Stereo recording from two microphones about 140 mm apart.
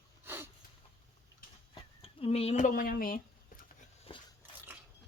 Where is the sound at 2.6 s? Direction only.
70° left (ahead or behind); by 3.2 s 90° left.